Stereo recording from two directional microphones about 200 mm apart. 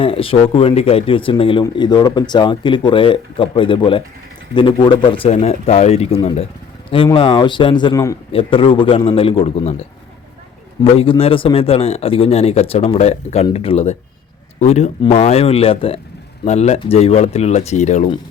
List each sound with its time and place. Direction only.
0.0 s speech: 25° left (ahead or behind)
10.9 s speech: 25° left (ahead or behind)